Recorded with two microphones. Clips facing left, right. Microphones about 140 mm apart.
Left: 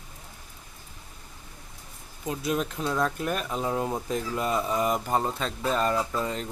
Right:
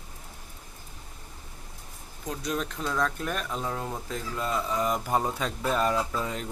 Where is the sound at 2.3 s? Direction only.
5° left (ahead or behind).